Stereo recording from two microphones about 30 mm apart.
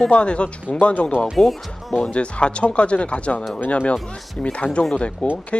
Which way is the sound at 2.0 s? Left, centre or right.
Left.